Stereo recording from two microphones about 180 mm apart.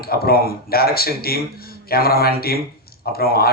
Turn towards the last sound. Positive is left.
turn(degrees=55)  # may be behind; listen again after turning